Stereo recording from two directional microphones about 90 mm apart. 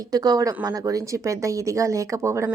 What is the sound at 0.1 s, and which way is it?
Speech, 45° right (ahead or behind).